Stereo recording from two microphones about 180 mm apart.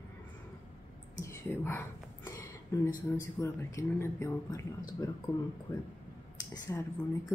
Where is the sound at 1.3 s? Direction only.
15° left (ahead or behind).